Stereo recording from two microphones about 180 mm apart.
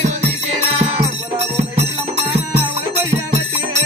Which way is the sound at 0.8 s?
35° right (ahead or behind).